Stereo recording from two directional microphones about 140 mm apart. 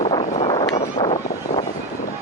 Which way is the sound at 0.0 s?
40° left (ahead or behind).